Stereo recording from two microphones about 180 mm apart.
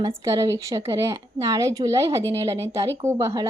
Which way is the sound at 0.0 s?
20° right (ahead or behind).